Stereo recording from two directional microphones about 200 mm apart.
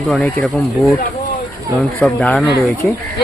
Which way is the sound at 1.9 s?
5° left (ahead or behind).